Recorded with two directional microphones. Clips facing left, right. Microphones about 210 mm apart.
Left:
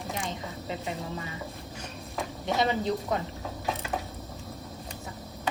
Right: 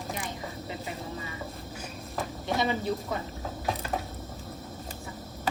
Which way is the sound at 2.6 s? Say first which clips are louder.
Left 2 dB; 20° left (ahead or behind).